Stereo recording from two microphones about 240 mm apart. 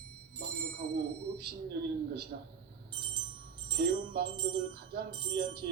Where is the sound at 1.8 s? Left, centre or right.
Right.